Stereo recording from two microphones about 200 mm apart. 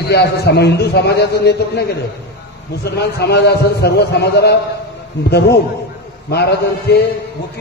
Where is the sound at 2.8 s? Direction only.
55° left (ahead or behind).